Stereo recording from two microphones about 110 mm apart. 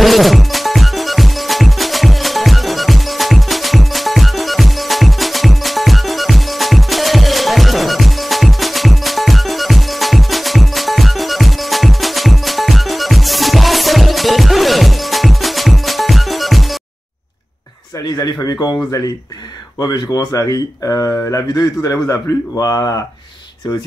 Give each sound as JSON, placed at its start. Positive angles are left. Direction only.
{"t": 0.0, "sound": "music", "side_deg": 0}
{"t": 18.0, "sound": "a sound", "side_deg": 35}
{"t": 19.8, "sound": "a man's voice", "side_deg": 35}